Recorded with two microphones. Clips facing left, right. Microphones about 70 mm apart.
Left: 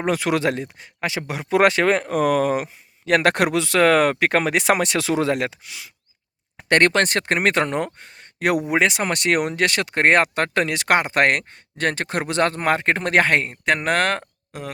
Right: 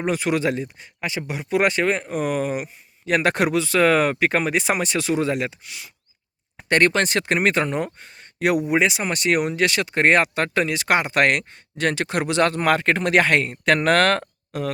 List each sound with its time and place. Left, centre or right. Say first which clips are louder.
0.0 s speech: left 1 dB; left
3.1 s speech: left 2 dB; left
6.7 s speech: left 1 dB; left
7.9 s a sound: right 2 dB; left
8.7 s speech: left 1 dB; left; by 14.7 s centre